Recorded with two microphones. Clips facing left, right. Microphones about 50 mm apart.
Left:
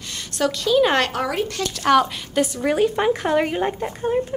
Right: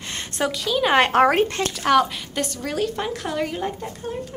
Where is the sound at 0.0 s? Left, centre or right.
Right.